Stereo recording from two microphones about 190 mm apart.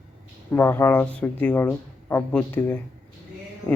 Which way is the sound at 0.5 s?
10° left (ahead or behind).